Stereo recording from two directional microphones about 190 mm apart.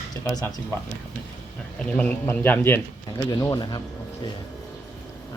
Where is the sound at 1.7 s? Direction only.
5° left (ahead or behind); by 3.8 s 20° left (ahead or behind).